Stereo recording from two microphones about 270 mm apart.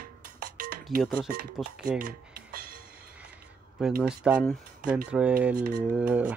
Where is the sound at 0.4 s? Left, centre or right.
Right.